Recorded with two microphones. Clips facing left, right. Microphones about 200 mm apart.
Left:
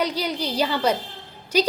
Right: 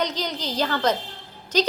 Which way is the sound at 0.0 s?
10° left (ahead or behind).